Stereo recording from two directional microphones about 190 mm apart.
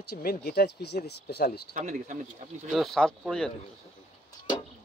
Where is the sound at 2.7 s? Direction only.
Centre (ahead or behind).